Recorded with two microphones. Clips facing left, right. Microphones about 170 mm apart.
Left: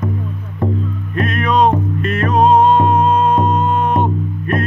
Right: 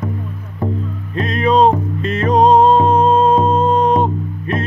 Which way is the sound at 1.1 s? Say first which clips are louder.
Right 2 dB; 30° right (ahead or behind).